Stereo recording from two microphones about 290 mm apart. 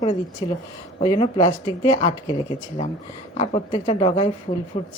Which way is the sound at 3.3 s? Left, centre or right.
Centre.